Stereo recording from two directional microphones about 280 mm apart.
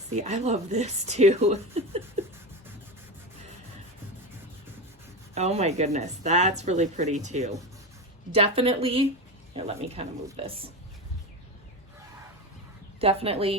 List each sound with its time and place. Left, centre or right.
0.1 s speech: right
5.3 s speech: right
13.0 s speech: right